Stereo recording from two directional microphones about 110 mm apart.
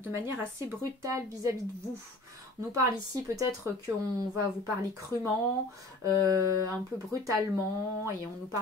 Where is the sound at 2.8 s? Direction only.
30° right (ahead or behind).